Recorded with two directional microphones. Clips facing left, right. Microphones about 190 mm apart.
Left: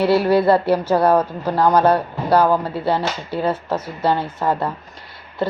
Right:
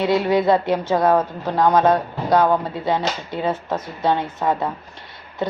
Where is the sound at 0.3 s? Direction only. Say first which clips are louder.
Left 2 dB; 5° left (ahead or behind).